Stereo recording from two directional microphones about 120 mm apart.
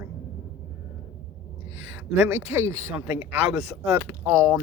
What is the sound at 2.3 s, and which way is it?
Speech, 20° right (ahead or behind).